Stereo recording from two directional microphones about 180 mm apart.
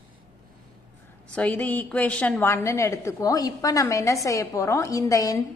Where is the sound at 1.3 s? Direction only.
10° left (ahead or behind).